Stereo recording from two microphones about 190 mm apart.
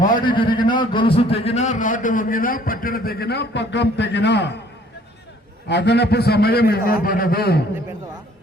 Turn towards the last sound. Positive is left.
turn(degrees=55)  # may be behind; listen again after turning